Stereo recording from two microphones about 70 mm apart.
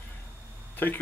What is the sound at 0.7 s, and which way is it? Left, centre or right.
Speech, left.